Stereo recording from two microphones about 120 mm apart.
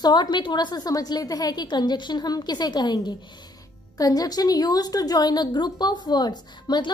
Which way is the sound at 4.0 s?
30° left (ahead or behind).